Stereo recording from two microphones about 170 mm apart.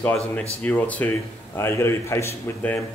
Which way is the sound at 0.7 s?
10° left (ahead or behind).